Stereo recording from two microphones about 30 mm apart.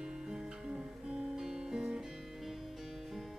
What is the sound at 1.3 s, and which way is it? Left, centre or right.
Music, centre.